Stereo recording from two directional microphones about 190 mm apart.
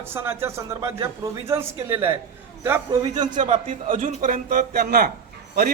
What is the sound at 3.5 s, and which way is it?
A man's voice, 40° right (ahead or behind).